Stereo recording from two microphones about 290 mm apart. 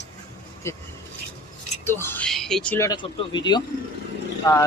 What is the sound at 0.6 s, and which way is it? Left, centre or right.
Speech, centre.